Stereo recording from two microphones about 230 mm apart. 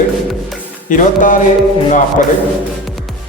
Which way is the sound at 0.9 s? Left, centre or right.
Left.